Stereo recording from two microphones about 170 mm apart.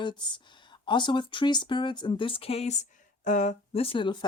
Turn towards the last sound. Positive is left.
turn(degrees=30)  # may be behind; listen again after turning